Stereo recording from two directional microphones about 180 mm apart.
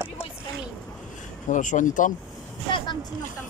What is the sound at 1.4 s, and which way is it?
Speech, 45° left (ahead or behind).